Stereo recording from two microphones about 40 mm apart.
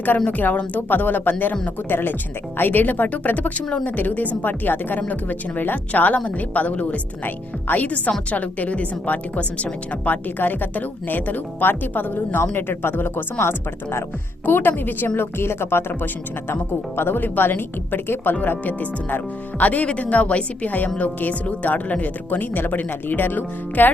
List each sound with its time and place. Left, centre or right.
0.3 s speech: left
1.9 s a woman's voice: left
2.6 s a woman's voice: left
13.4 s speech: left
14.4 s a woman's voice: left
18.6 s speech: left
20.7 s speech: left